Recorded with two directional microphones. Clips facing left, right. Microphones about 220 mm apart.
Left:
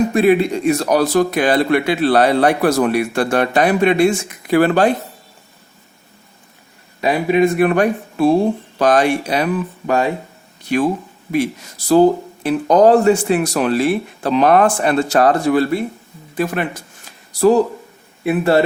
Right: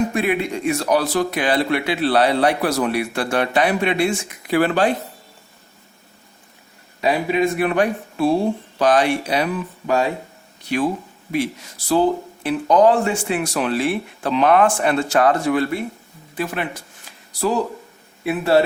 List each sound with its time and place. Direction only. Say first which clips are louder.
0.1 s speech: left 7 dB; 35° left (ahead or behind)
7.0 s speech: left 4 dB; 55° left (ahead or behind)
11.9 s speech: left 6 dB; 40° left (ahead or behind)
18.2 s a man's voice: left 5 dB; 50° left (ahead or behind)